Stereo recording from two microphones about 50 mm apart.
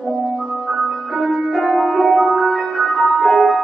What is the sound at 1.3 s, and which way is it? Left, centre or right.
Music, centre.